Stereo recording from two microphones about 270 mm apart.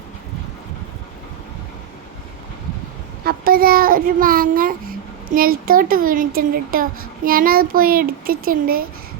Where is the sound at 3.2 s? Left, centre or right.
Right.